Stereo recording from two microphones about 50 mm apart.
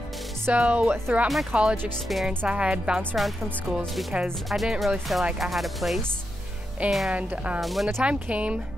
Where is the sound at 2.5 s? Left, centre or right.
Right.